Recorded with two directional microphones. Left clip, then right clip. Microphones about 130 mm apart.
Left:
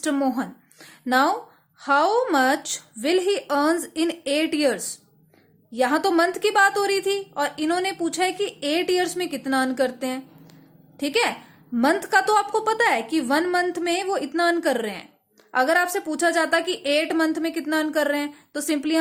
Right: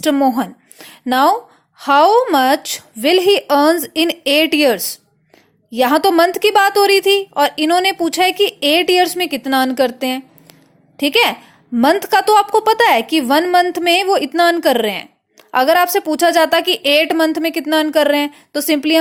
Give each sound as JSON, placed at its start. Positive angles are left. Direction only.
{"t": 0.0, "sound": "a woman's voice", "side_deg": -40}